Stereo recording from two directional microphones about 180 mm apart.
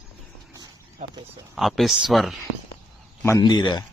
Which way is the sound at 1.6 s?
Centre (ahead or behind).